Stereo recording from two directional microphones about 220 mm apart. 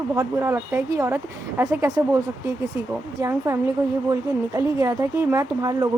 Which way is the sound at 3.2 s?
15° right (ahead or behind).